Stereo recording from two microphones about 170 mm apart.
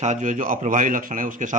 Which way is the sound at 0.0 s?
45° right (ahead or behind).